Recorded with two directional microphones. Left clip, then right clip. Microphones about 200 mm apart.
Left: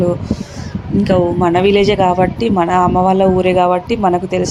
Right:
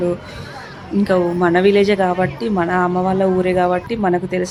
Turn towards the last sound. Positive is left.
turn(degrees=15)  # may be behind; listen again after turning